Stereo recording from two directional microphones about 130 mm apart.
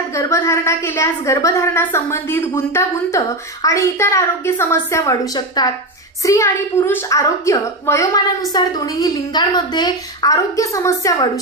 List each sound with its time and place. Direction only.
0.1 s a woman's voice: 20° left (ahead or behind)